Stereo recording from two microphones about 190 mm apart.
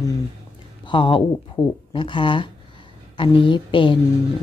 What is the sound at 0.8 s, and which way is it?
Speech, 25° left (ahead or behind).